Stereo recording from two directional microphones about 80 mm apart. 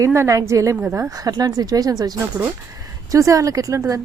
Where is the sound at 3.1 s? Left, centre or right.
Right.